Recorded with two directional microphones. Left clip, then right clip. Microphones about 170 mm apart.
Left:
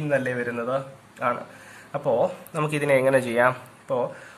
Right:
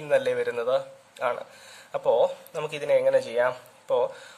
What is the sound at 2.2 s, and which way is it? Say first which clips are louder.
Speech: left 1 dB; 30° right (ahead or behind).